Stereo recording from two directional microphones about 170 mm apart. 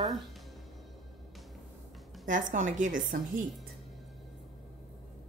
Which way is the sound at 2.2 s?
50° right (ahead or behind).